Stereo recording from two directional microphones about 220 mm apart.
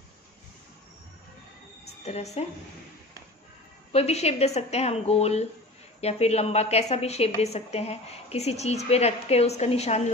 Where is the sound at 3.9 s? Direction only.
30° left (ahead or behind).